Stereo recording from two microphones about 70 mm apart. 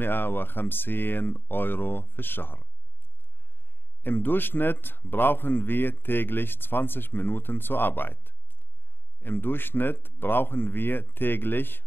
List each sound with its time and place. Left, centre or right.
0.0 s a man's voice: left
4.0 s a man's voice: left